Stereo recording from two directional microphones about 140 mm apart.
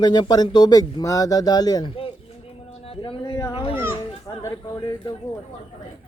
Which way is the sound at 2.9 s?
40° left (ahead or behind).